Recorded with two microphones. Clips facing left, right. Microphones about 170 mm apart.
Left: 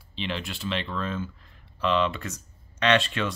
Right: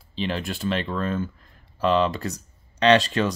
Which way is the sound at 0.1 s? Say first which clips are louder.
Right 5 dB; 40° right (ahead or behind).